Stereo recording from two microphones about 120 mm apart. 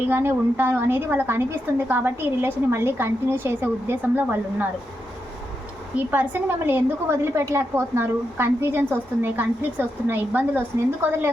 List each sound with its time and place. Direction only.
0.1 s a woman's voice: 20° right (ahead or behind)
6.1 s a woman's voice: 15° right (ahead or behind)